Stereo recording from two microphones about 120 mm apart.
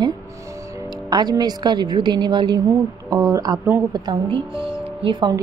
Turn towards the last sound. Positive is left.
turn(degrees=-35)  # may be behind; listen again after turning